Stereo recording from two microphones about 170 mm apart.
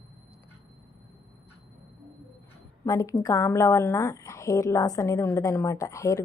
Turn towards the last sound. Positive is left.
turn(degrees=20)  # may be behind; listen again after turning